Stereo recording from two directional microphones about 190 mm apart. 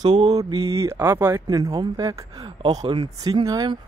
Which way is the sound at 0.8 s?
15° right (ahead or behind).